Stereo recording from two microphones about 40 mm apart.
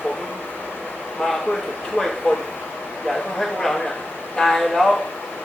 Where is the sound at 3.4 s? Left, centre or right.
Centre.